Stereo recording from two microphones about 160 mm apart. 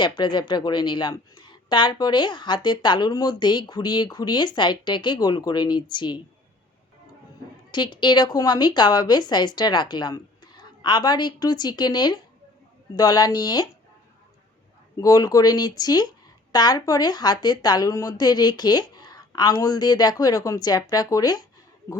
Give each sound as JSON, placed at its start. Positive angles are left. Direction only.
{"t": 0.0, "sound": "a woman's voice", "side_deg": 30}
{"t": 7.7, "sound": "a woman's voice", "side_deg": 30}
{"t": 14.9, "sound": "a woman's voice", "side_deg": 20}